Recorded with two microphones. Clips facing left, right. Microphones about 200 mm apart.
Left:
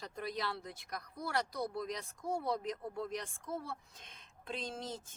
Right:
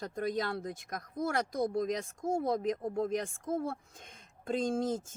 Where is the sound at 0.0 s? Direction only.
45° right (ahead or behind).